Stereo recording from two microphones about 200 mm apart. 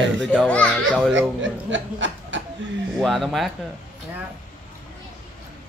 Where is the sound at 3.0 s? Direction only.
Centre (ahead or behind).